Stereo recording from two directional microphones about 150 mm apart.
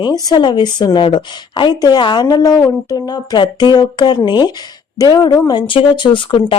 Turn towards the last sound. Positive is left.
turn(degrees=35)  # may be behind; listen again after turning